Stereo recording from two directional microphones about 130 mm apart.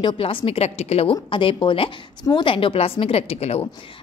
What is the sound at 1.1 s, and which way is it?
A woman's voice, 40° left (ahead or behind).